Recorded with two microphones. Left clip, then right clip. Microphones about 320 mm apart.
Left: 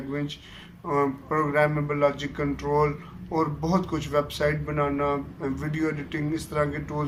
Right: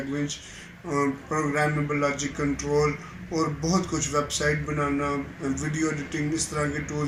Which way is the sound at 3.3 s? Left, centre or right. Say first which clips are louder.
Left 1 dB; left.